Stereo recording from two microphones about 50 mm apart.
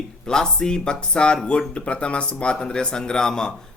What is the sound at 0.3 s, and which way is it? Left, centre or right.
A man's voice, centre.